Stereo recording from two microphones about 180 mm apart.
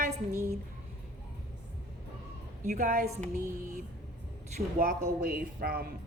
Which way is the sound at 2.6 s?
45° right (ahead or behind).